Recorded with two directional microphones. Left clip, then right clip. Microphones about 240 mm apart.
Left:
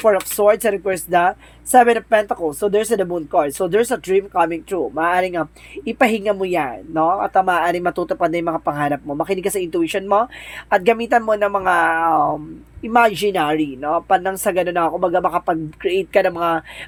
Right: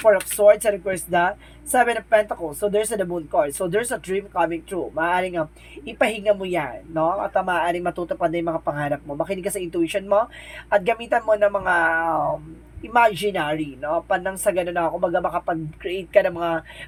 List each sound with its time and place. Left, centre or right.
0.0 s speech: left